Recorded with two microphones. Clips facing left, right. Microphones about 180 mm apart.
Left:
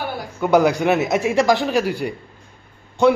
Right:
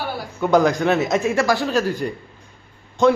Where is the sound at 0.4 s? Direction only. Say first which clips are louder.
Left 1 dB; 10° left (ahead or behind).